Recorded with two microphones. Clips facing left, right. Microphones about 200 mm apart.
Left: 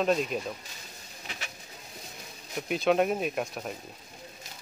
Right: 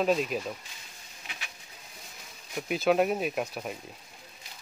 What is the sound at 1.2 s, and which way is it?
Pigeon, 40° left (ahead or behind).